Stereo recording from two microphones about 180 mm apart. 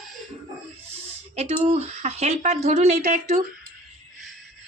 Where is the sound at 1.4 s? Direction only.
35° right (ahead or behind).